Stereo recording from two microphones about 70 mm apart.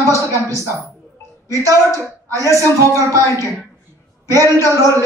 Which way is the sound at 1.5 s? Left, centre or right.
Right.